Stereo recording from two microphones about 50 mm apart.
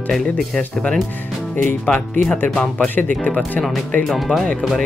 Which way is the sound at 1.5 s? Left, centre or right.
Left.